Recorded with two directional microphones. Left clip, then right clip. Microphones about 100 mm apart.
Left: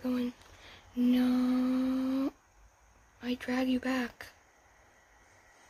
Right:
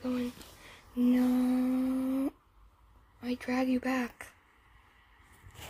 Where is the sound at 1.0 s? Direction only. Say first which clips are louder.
Right 1 dB; 25° left (ahead or behind).